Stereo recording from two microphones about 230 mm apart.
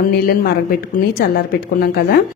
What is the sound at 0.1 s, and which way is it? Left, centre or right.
A woman's voice, left.